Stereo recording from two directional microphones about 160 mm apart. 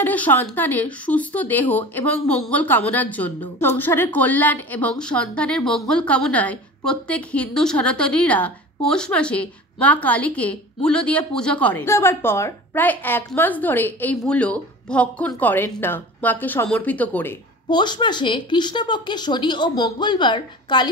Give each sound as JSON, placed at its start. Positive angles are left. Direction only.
{"t": 0.0, "sound": "a woman's voice", "side_deg": 10}
{"t": 17.6, "sound": "a woman's voice", "side_deg": 25}